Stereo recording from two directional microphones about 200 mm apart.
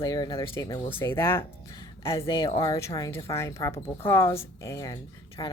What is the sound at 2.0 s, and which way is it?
Speech, 25° left (ahead or behind).